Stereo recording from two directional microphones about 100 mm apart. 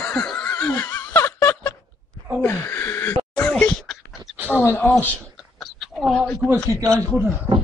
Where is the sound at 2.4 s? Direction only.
20° left (ahead or behind).